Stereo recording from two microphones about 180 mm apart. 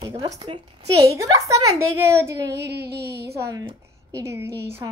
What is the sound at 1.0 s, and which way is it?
A woman's voice, 20° right (ahead or behind).